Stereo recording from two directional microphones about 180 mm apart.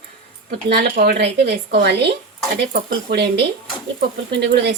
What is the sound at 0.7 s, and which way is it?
A woman's voice, 55° right (ahead or behind).